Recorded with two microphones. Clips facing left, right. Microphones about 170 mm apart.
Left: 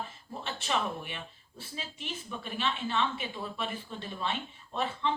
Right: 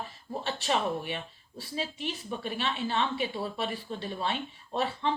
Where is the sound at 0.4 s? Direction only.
35° right (ahead or behind).